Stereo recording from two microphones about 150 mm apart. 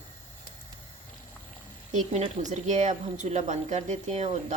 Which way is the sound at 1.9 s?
50° right (ahead or behind).